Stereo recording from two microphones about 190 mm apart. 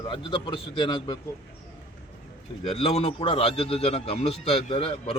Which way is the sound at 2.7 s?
30° left (ahead or behind).